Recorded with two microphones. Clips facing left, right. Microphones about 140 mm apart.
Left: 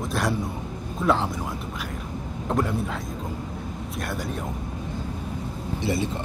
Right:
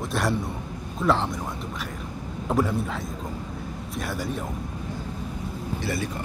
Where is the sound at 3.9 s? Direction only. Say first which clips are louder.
Right 2 dB; centre (ahead or behind).